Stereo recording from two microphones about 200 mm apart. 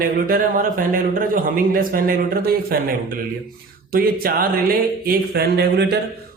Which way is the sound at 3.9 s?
50° right (ahead or behind).